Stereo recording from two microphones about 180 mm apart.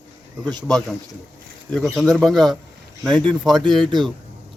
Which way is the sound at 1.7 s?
Centre (ahead or behind).